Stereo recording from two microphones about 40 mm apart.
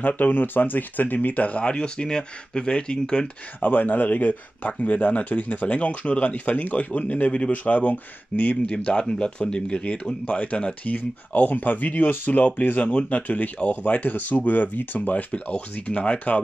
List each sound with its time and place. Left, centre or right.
0.0 s speech: left
1.7 s speech: left
3.6 s speech: left
7.5 s speech: left
8.6 s speech: left
10.2 s speech: left
11.0 s speech: left
12.6 s speech: left